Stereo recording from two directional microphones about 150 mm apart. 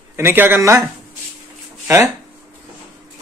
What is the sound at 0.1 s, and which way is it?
Speech, 15° right (ahead or behind).